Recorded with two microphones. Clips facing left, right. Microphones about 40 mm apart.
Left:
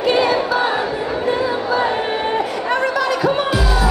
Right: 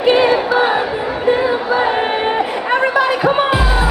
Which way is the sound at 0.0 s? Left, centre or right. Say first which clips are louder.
Right 4 dB; right.